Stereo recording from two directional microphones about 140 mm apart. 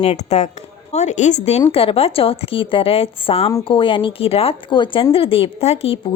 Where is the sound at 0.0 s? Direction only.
50° left (ahead or behind).